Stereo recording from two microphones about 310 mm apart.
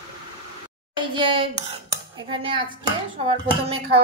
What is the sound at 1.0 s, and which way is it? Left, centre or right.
A child's voice, centre.